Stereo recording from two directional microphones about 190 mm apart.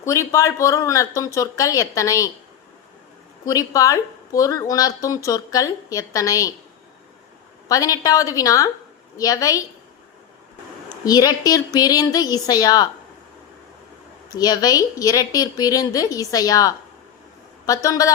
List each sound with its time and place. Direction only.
0.0 s a woman's voice: 15° left (ahead or behind)
3.4 s a woman's voice: 20° left (ahead or behind)
7.7 s a woman's voice: 20° left (ahead or behind)
11.0 s a woman's voice: 20° left (ahead or behind)
14.3 s a woman's voice: 20° left (ahead or behind)
17.8 s a woman's voice: 20° left (ahead or behind)